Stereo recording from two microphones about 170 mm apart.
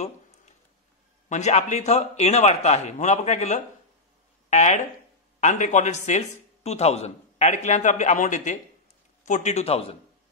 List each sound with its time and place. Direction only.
1.3 s a man's voice: 40° left (ahead or behind)